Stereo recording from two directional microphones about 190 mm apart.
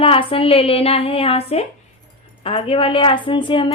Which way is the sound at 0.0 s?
30° left (ahead or behind).